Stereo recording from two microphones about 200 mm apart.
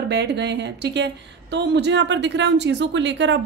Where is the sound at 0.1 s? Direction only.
60° right (ahead or behind).